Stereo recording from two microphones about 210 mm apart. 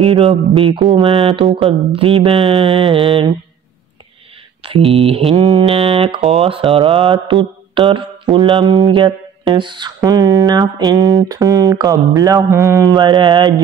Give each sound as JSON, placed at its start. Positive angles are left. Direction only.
{"t": 0.0, "sound": "speech", "side_deg": -25}
{"t": 4.6, "sound": "speech", "side_deg": -25}
{"t": 9.9, "sound": "a sound", "side_deg": -20}
{"t": 12.4, "sound": "speech", "side_deg": -15}